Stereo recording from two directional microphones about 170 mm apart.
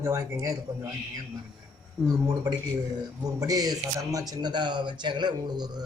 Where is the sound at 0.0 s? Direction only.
15° right (ahead or behind).